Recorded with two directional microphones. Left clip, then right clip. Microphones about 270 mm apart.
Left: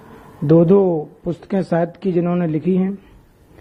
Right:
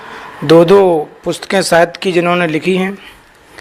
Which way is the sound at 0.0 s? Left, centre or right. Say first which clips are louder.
Right 9 dB; centre.